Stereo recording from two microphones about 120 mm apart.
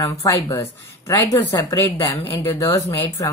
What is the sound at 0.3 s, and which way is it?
A woman's voice, 20° left (ahead or behind).